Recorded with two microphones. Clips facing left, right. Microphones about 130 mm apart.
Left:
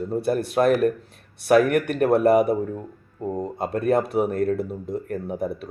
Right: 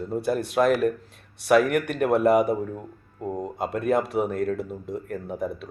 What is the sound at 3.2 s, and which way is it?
Speech, centre (ahead or behind).